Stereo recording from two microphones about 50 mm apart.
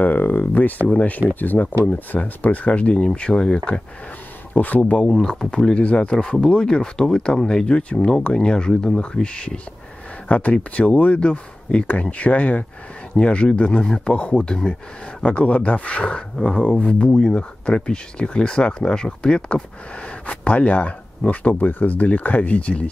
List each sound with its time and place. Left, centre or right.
0.0 s a sound: left
0.8 s speech: left
4.6 s speech: left
5.0 s speech: centre